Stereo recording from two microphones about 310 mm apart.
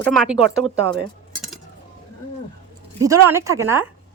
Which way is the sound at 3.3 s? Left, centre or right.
Centre.